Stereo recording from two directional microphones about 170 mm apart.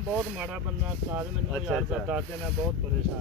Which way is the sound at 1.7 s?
Centre (ahead or behind).